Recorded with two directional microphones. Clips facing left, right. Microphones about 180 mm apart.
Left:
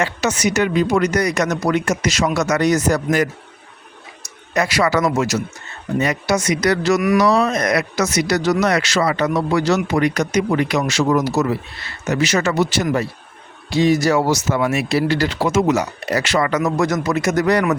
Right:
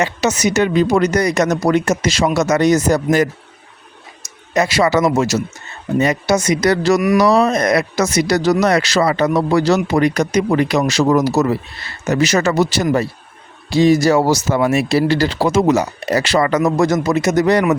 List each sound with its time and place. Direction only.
0.0 s speech: 20° right (ahead or behind)
4.5 s speech: 25° right (ahead or behind)